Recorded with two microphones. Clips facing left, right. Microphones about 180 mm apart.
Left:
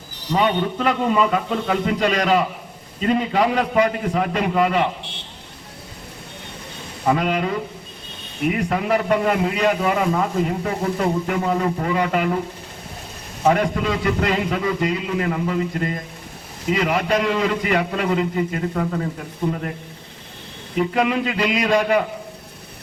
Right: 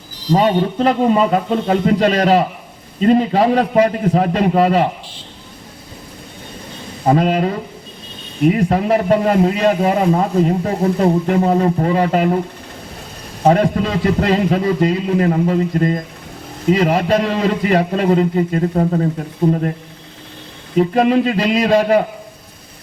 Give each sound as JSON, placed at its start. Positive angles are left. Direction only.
{"t": 0.3, "sound": "a man's voice", "side_deg": -35}
{"t": 7.0, "sound": "a man's voice", "side_deg": -35}
{"t": 13.4, "sound": "a man's voice", "side_deg": -35}
{"t": 20.7, "sound": "a man's voice", "side_deg": -35}